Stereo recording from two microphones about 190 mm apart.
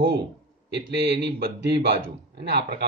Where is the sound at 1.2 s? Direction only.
60° right (ahead or behind).